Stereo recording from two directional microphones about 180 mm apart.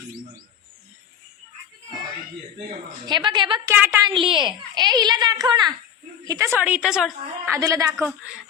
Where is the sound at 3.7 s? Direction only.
15° right (ahead or behind).